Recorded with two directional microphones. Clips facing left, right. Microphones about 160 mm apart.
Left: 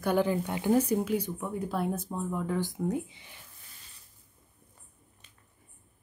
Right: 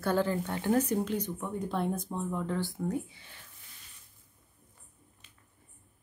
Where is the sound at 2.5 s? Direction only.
15° left (ahead or behind).